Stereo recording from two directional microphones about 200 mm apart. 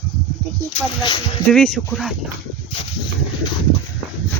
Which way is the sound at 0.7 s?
20° left (ahead or behind).